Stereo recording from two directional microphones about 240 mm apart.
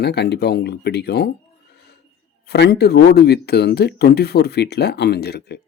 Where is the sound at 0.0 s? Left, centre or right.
Left.